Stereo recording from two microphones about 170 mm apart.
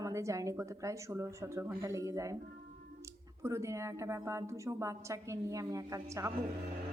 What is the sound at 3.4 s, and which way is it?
A woman's voice, 15° right (ahead or behind).